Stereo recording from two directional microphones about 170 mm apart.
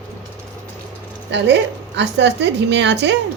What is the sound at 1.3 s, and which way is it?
A woman's voice, 90° right.